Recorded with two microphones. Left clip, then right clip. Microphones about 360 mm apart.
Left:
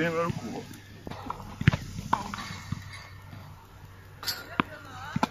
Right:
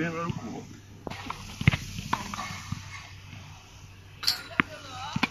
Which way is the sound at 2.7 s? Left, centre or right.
Centre.